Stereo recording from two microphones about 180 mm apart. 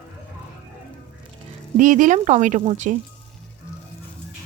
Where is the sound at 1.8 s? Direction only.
45° right (ahead or behind).